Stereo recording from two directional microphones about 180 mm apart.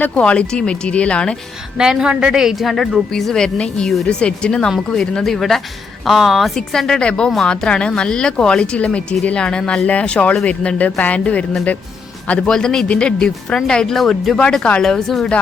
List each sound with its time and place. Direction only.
0.0 s a woman's voice: 5° left (ahead or behind)